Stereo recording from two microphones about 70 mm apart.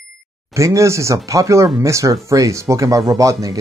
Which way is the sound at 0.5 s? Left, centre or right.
Right.